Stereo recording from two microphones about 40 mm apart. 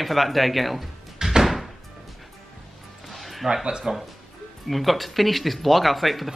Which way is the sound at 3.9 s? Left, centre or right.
Right.